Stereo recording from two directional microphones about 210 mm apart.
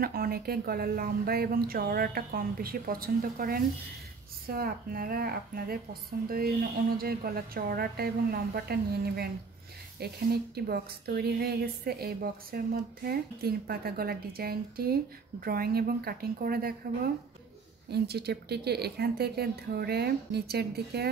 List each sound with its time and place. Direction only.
0.0 s a woman's voice: 45° right (ahead or behind)
17.8 s a woman's voice: 50° right (ahead or behind)